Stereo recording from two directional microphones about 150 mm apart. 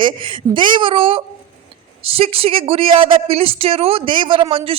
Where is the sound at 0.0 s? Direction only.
35° right (ahead or behind).